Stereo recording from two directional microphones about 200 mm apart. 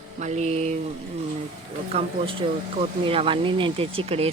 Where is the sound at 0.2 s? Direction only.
35° right (ahead or behind).